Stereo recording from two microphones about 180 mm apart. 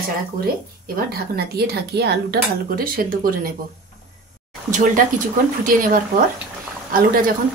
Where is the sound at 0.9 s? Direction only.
60° right (ahead or behind).